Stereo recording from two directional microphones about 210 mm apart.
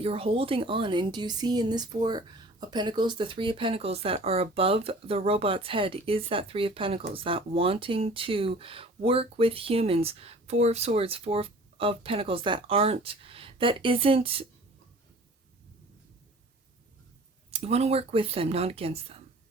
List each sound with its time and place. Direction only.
0.0 s speech: 25° right (ahead or behind)
17.5 s speech: 30° right (ahead or behind)